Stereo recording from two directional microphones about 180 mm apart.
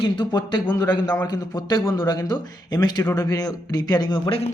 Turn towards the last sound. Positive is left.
turn(degrees=30)  # may be behind; listen again after turning